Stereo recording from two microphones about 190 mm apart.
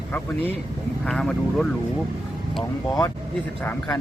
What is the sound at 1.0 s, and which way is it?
Speech, 5° left (ahead or behind).